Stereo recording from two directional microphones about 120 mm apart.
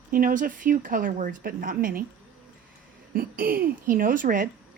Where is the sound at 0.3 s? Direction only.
90° right.